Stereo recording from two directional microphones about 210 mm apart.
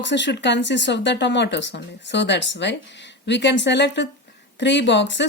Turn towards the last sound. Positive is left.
turn(degrees=55)  # may be behind; listen again after turning